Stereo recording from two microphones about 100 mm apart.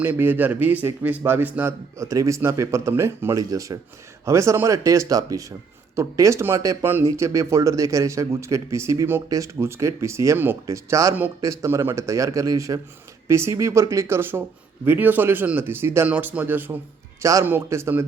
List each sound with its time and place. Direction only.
0.0 s speech: 20° right (ahead or behind)
2.0 s speech: 30° right (ahead or behind)